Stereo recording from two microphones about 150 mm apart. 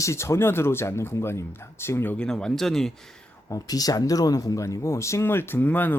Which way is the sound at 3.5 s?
25° left (ahead or behind).